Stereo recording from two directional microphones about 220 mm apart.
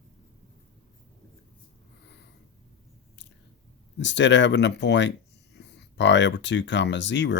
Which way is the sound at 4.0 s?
55° left (ahead or behind).